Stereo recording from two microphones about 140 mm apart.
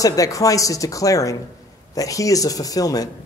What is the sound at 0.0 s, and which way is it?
A man's voice, 25° left (ahead or behind).